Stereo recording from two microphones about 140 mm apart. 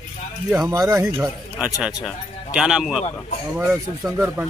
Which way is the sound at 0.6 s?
25° right (ahead or behind).